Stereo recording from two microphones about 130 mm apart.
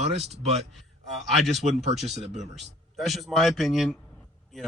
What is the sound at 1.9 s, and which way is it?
Speech, 55° right (ahead or behind).